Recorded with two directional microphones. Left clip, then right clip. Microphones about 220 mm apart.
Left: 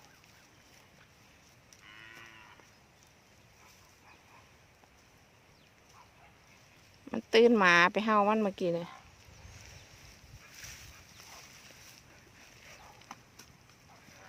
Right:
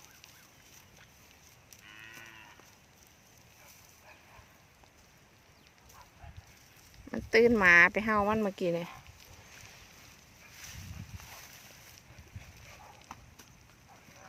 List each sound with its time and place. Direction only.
1.9 s cattle: 5° left (ahead or behind)
7.1 s speech: 10° left (ahead or behind)
13.1 s clip-clop: 15° left (ahead or behind)